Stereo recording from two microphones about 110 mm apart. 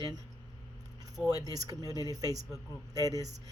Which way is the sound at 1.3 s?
35° right (ahead or behind).